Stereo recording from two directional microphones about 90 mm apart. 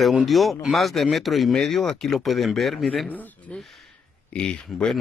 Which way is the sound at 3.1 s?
20° left (ahead or behind).